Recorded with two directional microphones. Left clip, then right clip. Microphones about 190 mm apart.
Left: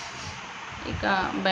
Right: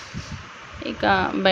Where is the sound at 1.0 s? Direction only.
35° right (ahead or behind).